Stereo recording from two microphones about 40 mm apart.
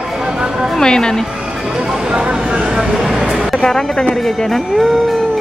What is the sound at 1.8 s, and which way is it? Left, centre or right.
Speech, centre.